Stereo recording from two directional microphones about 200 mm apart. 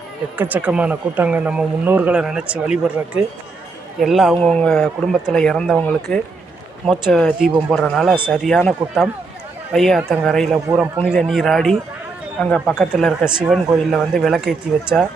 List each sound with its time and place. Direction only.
0.3 s speech: 10° right (ahead or behind)